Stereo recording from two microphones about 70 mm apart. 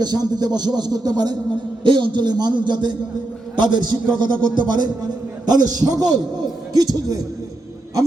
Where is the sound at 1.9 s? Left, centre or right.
Right.